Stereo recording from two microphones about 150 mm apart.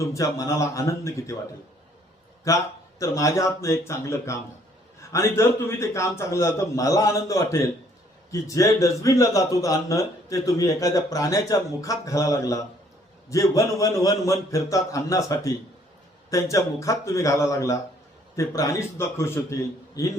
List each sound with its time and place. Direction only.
0.0 s a man's voice: 20° left (ahead or behind)
2.5 s a man's voice: 20° left (ahead or behind)